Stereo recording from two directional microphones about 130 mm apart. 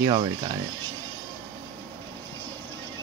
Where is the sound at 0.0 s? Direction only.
30° right (ahead or behind).